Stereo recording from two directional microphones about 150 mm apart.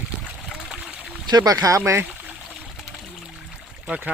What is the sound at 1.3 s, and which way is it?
Speech, 25° right (ahead or behind).